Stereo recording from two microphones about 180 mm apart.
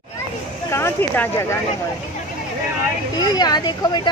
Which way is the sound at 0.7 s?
15° left (ahead or behind).